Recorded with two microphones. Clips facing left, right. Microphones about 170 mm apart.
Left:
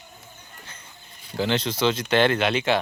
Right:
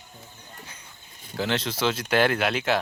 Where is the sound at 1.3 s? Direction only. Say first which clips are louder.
Left 3 dB; centre (ahead or behind).